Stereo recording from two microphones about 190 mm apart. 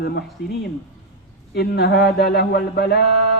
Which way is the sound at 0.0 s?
55° left (ahead or behind).